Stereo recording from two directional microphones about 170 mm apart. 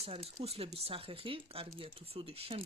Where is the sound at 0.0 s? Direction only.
35° right (ahead or behind).